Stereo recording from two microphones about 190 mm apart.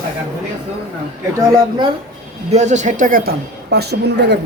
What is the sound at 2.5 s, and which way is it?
Speech, 40° right (ahead or behind).